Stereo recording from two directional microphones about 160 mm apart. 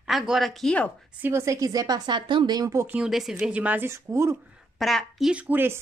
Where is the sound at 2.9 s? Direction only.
Centre (ahead or behind).